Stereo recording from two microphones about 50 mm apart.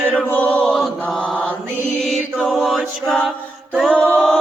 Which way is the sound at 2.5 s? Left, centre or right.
Centre.